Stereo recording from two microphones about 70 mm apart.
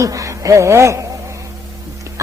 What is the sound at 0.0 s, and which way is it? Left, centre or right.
Speech, right.